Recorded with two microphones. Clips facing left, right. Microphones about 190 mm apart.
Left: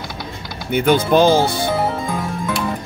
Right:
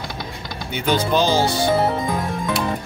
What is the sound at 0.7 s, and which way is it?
Speech, 55° left (ahead or behind).